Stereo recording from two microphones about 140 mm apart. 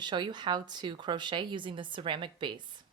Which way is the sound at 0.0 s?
30° right (ahead or behind).